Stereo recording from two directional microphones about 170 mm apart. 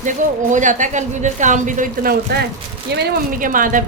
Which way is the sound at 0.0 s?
50° right (ahead or behind).